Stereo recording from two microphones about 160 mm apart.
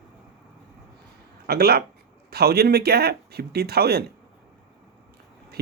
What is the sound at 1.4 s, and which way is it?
Speech, 80° right.